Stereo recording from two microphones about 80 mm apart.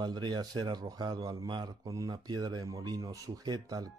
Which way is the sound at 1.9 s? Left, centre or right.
Right.